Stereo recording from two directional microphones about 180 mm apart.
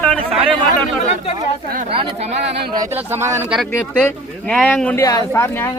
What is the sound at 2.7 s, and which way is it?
Speech, 20° right (ahead or behind).